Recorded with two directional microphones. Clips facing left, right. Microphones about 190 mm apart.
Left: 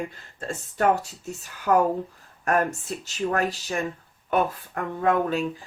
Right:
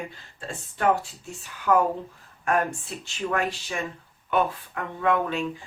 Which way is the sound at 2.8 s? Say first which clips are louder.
Left 3 dB; 40° left (ahead or behind).